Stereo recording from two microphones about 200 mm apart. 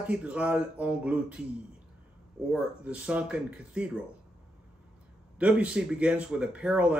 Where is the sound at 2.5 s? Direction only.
5° right (ahead or behind).